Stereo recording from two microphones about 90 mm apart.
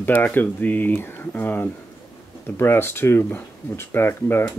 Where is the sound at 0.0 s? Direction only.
20° left (ahead or behind).